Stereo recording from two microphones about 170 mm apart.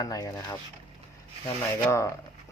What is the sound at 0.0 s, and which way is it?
Speech, 20° left (ahead or behind).